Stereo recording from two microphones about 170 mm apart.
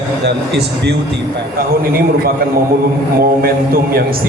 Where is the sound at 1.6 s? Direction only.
60° right (ahead or behind).